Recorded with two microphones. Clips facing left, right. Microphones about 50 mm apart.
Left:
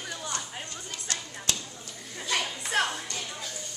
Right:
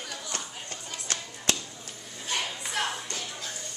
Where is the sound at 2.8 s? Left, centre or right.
Left.